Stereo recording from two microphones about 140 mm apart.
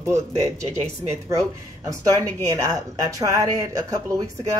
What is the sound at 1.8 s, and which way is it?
Speech, 25° right (ahead or behind).